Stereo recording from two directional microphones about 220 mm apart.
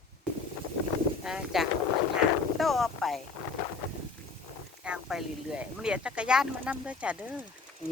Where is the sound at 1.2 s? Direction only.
Centre (ahead or behind).